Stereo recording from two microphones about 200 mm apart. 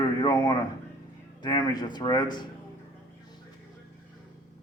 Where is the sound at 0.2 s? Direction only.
20° left (ahead or behind).